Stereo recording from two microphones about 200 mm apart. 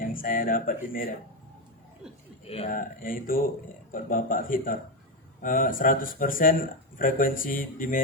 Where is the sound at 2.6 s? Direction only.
45° left (ahead or behind).